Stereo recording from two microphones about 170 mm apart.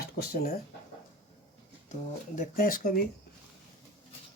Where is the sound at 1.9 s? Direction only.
50° left (ahead or behind).